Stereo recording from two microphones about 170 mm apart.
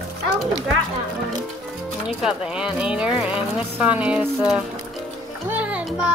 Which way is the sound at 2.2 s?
5° right (ahead or behind).